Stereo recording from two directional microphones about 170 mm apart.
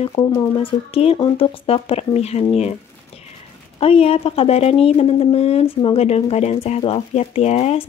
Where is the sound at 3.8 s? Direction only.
35° left (ahead or behind).